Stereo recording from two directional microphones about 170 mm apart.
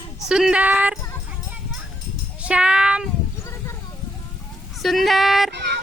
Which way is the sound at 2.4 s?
5° right (ahead or behind).